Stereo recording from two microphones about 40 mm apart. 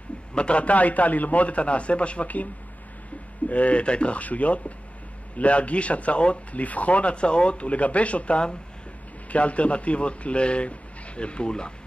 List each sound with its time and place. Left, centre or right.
0.3 s speech: left
3.4 s speech: left